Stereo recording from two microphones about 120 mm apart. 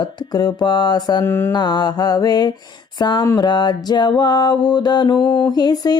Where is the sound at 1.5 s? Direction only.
35° left (ahead or behind).